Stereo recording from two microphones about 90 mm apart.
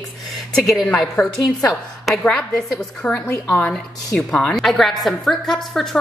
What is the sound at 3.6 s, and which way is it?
A woman's voice, 10° left (ahead or behind).